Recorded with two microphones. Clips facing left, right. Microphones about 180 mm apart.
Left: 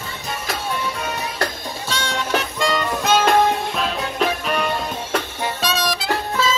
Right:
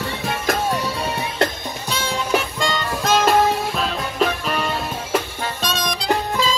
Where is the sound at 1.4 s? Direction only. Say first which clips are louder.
Right 5 dB; 25° right (ahead or behind).